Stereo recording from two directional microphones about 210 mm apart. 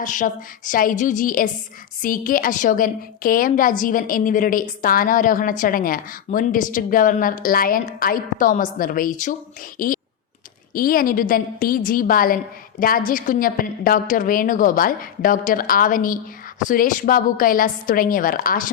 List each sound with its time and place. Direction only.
0.0 s a woman's voice: 40° left (ahead or behind)